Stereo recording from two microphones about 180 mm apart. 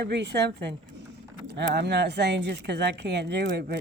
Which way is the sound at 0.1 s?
70° right (ahead or behind).